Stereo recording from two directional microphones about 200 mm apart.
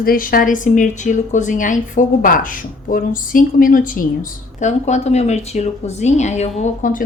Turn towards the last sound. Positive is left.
turn(degrees=40)  # may be behind; listen again after turning